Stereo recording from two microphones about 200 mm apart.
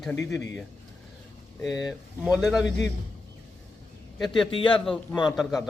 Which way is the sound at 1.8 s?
5° right (ahead or behind).